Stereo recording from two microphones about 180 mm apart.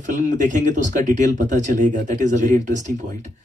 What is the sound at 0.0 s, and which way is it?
Speech, 45° right (ahead or behind).